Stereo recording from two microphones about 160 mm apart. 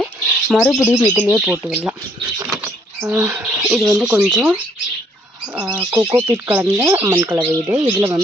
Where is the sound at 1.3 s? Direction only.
Centre (ahead or behind).